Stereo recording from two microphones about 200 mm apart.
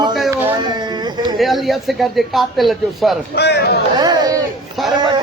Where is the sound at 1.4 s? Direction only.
Centre (ahead or behind).